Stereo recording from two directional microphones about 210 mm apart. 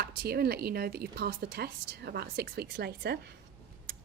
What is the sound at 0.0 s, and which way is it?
Speech, 50° right (ahead or behind).